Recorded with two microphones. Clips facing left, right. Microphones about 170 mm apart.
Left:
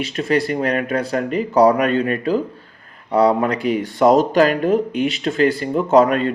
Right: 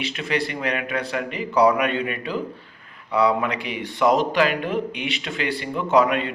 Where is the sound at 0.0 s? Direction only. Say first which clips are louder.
Left 6 dB; 40° left (ahead or behind).